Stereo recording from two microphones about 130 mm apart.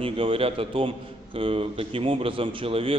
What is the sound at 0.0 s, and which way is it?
A man's voice, 45° right (ahead or behind).